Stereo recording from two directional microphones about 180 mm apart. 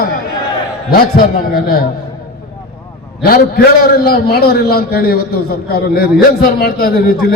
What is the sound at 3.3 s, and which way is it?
A man's voice, 55° left (ahead or behind).